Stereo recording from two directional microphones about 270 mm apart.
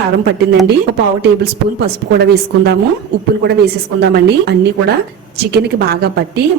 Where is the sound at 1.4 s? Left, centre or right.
Right.